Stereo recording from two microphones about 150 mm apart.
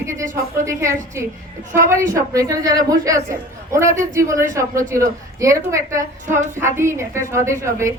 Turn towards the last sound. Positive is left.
turn(degrees=-20)  # may be behind; listen again after turning